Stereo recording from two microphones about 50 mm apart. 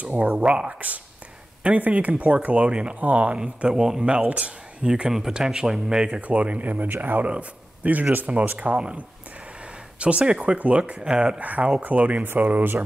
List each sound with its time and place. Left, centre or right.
0.0 s speech: right
3.3 s speech: centre
6.0 s speech: right
11.3 s speech: right